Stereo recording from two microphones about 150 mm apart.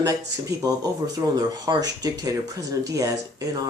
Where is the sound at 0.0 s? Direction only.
25° right (ahead or behind).